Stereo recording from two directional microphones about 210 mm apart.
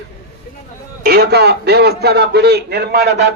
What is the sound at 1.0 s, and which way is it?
A man's voice, 50° right (ahead or behind).